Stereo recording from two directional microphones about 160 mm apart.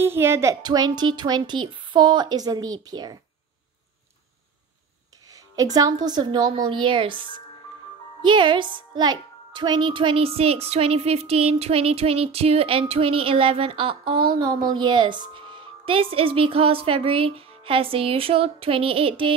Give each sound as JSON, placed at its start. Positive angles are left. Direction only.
{"t": 0.0, "sound": "a child's voice", "side_deg": -15}
{"t": 5.3, "sound": "a woman's voice", "side_deg": -20}